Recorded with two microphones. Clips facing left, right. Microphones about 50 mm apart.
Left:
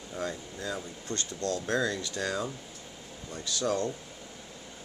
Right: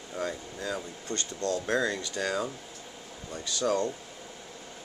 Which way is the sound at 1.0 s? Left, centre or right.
Right.